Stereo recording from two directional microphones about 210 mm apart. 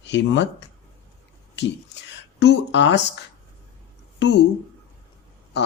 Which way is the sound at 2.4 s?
55° left (ahead or behind).